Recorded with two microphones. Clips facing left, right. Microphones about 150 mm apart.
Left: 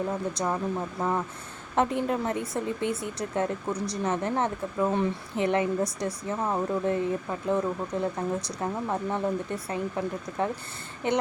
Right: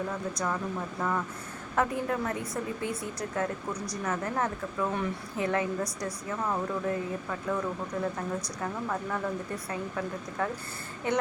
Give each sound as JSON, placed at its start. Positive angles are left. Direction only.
{"t": 0.1, "sound": "speech", "side_deg": 25}